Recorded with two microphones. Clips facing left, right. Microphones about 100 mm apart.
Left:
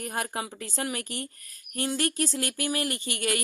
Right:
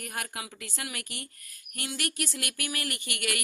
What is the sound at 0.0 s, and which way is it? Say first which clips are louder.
Speech: left 6 dB; 30° left (ahead or behind).